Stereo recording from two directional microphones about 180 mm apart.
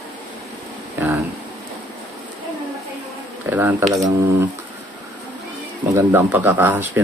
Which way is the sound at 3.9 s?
20° right (ahead or behind).